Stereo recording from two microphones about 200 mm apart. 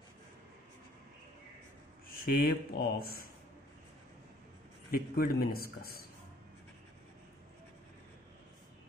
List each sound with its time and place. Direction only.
2.0 s speech: 50° left (ahead or behind)
4.9 s speech: 50° left (ahead or behind)